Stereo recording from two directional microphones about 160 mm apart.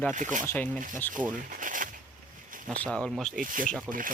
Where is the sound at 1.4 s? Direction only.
55° right (ahead or behind).